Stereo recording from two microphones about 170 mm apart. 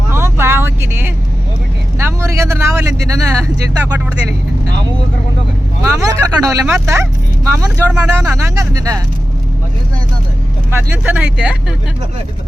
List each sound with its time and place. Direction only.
0.1 s vehicle: 15° right (ahead or behind)
5.8 s speech: 20° right (ahead or behind)
10.7 s speech: 15° right (ahead or behind)